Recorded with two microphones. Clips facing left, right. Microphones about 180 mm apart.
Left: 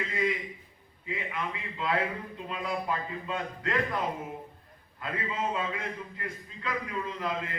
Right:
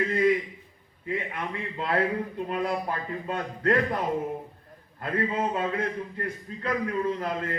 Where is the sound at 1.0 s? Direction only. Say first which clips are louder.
Right 4 dB; 45° right (ahead or behind).